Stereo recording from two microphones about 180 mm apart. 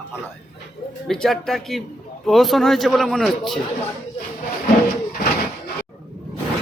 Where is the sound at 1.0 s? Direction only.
5° left (ahead or behind).